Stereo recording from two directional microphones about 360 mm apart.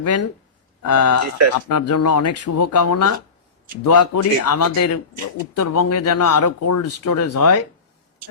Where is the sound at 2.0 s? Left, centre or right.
Left.